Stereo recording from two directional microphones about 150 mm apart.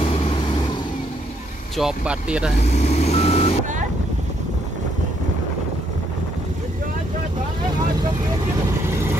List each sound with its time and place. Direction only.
1.8 s speech: 5° right (ahead or behind)
2.6 s reversing beeps: 50° left (ahead or behind)